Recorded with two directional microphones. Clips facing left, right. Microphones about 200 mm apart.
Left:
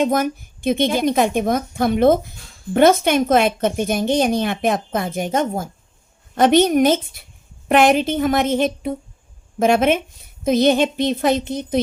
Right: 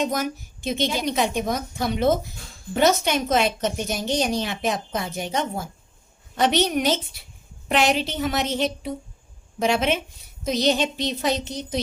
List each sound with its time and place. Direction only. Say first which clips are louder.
0.0 s a woman's voice: left 6 dB; 55° left (ahead or behind)